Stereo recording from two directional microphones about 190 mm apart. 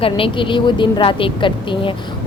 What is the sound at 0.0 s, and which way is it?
A woman's voice, 25° left (ahead or behind).